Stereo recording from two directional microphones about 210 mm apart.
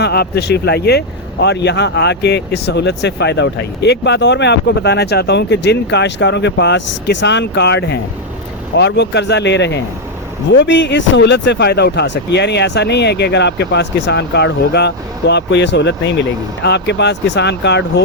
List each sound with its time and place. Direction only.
0.0 s speech: 50° left (ahead or behind)